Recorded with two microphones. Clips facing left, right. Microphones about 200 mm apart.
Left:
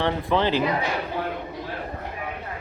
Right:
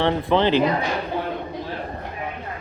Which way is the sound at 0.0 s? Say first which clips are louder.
Right 3 dB; 30° right (ahead or behind).